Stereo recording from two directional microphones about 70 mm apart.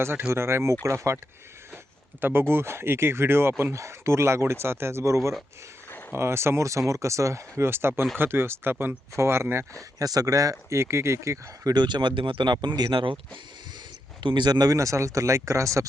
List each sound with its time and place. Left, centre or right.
0.0 s speech: right
2.2 s speech: right
5.9 s a sound: left
6.1 s speech: right
10.0 s speech: right
11.7 s speech: right
14.3 s speech: right
14.8 s speech: right